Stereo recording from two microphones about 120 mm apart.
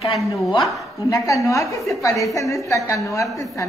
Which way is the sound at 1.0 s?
25° left (ahead or behind).